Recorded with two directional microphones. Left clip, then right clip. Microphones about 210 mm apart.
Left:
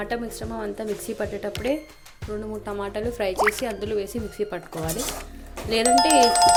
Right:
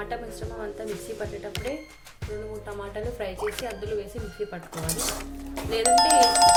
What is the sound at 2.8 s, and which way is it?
Speech, 45° left (ahead or behind).